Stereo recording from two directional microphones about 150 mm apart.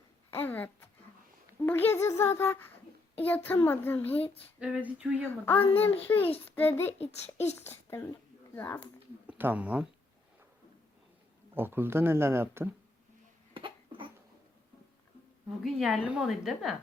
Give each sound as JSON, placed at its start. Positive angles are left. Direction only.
{"t": 0.3, "sound": "a child's voice", "side_deg": 15}
{"t": 4.6, "sound": "speech", "side_deg": -10}
{"t": 5.3, "sound": "a child's voice", "side_deg": 15}
{"t": 7.0, "sound": "a child's voice", "side_deg": 45}
{"t": 7.6, "sound": "a child's voice", "side_deg": 15}
{"t": 9.2, "sound": "speech", "side_deg": -10}
{"t": 11.5, "sound": "speech", "side_deg": -15}
{"t": 13.5, "sound": "cough", "side_deg": -35}
{"t": 15.6, "sound": "a woman's voice", "side_deg": 0}